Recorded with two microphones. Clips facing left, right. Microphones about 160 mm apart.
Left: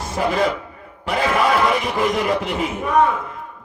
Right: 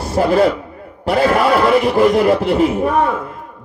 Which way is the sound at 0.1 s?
35° right (ahead or behind).